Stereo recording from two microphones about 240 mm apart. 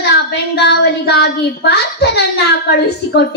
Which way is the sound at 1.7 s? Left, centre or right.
Left.